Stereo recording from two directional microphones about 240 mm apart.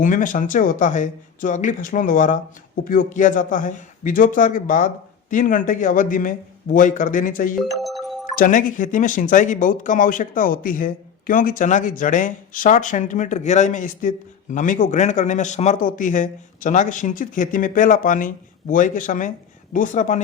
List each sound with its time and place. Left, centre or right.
0.0 s speech: left
7.8 s music: centre
8.4 s speech: left